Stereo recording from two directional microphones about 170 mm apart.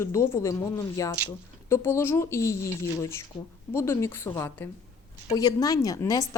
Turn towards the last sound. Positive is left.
turn(degrees=20)  # may be behind; listen again after turning